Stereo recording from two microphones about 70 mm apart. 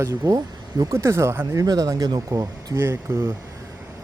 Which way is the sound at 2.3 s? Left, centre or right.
Right.